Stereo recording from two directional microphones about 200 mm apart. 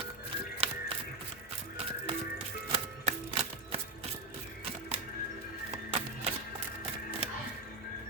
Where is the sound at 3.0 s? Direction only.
30° right (ahead or behind).